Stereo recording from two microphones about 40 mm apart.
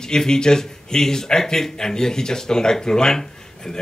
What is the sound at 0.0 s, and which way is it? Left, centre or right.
Speech, centre.